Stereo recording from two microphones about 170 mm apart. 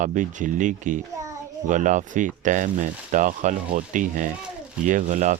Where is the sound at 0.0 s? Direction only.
45° right (ahead or behind).